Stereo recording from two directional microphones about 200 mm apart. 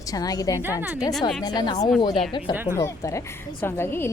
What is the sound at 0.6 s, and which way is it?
Speech, 10° right (ahead or behind).